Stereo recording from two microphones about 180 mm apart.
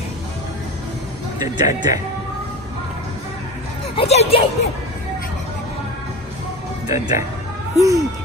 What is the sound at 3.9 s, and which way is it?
Speech, 35° left (ahead or behind).